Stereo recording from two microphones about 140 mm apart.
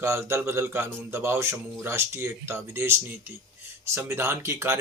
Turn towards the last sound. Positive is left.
turn(degrees=-20)  # may be behind; listen again after turning